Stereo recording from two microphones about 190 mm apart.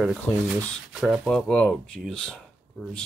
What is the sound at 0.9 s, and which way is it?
Speech, 5° right (ahead or behind).